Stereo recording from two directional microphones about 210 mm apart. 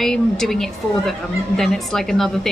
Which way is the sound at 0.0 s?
Centre (ahead or behind).